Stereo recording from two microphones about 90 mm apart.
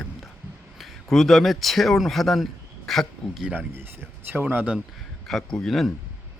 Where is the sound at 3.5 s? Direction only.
20° right (ahead or behind).